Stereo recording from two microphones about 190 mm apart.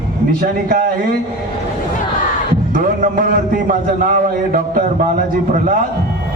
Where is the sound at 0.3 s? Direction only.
50° right (ahead or behind).